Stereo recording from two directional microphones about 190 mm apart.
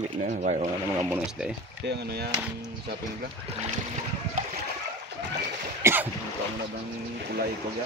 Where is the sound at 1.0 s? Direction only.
10° right (ahead or behind).